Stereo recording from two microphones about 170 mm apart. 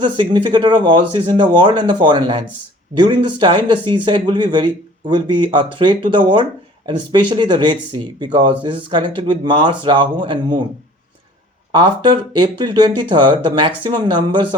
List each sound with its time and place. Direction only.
0.0 s speech: 25° right (ahead or behind)
11.7 s speech: 25° right (ahead or behind)